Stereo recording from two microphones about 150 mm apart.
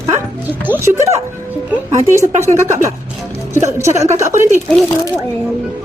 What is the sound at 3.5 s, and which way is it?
Speech, 20° right (ahead or behind).